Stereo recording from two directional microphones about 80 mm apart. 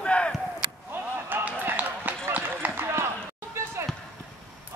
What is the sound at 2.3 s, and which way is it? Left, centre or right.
Run, right.